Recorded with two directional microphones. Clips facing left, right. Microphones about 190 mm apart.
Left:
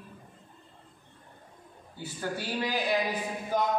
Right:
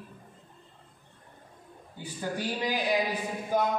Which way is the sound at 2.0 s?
15° right (ahead or behind).